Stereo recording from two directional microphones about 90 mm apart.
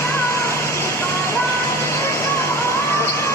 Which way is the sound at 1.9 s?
30° left (ahead or behind).